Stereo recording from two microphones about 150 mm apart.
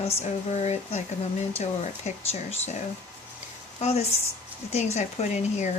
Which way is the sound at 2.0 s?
50° left (ahead or behind).